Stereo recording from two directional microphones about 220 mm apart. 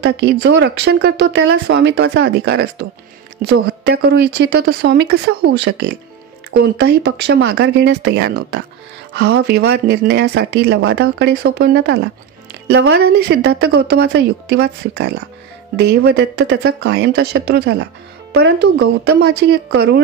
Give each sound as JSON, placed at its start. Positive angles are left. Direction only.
{"t": 0.0, "sound": "speech", "side_deg": -45}